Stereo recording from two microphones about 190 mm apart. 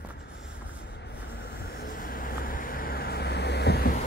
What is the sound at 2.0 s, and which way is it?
Vehicle, 50° left (ahead or behind).